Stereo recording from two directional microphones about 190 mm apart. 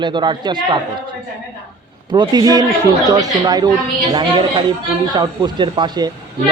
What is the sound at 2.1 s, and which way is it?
A man's voice, 20° right (ahead or behind).